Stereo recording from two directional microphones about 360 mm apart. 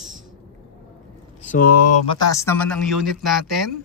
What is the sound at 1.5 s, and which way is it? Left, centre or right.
Speech, left.